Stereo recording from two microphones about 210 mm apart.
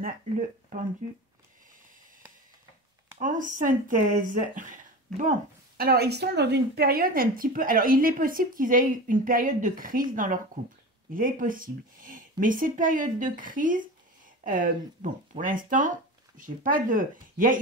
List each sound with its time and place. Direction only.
3.2 s speech: 40° right (ahead or behind)